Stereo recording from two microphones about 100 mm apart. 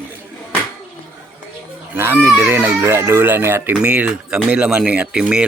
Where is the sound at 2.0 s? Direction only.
20° right (ahead or behind).